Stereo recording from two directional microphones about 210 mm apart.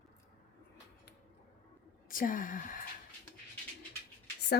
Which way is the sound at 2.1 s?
40° left (ahead or behind).